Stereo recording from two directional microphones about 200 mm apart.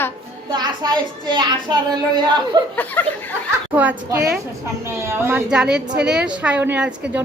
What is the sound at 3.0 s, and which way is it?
Speech, 10° left (ahead or behind).